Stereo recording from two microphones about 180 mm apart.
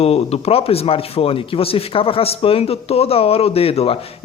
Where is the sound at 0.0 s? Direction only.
35° left (ahead or behind).